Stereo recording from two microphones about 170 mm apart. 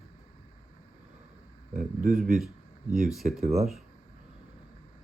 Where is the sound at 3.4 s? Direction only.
40° right (ahead or behind).